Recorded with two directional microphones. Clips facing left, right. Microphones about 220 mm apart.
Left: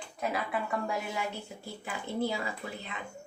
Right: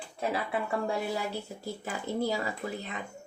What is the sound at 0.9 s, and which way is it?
Speech, 40° right (ahead or behind).